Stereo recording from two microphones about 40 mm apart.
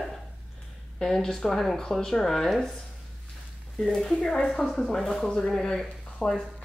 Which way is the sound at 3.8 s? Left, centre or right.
Centre.